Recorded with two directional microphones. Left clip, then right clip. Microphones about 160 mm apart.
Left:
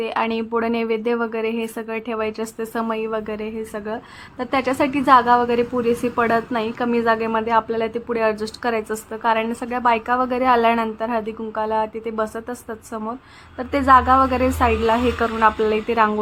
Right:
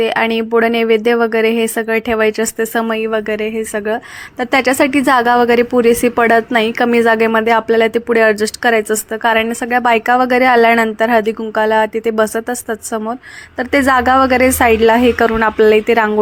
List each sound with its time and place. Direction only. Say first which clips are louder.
0.0 s speech: right 8 dB; 30° right (ahead or behind)